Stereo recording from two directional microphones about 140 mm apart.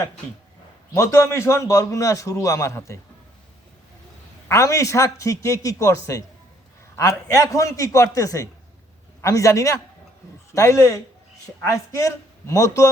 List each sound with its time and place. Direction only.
0.9 s a man's voice: 20° left (ahead or behind)
4.4 s a man's voice: 20° left (ahead or behind)